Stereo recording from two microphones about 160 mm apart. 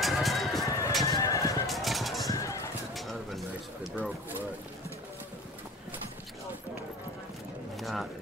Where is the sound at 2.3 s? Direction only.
20° left (ahead or behind).